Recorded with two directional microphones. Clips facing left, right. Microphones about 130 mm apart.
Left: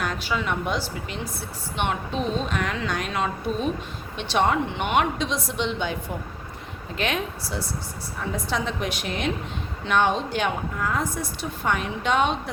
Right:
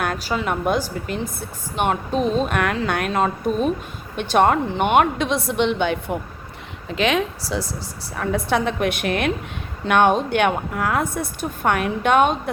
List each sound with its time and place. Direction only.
0.0 s a woman's voice: 55° right (ahead or behind)
2.5 s a woman's voice: 60° right (ahead or behind)
3.1 s a woman's voice: 45° right (ahead or behind); by 6.0 s 65° right (ahead or behind)
6.9 s speech: 90° right
8.1 s a woman's voice: 65° right (ahead or behind)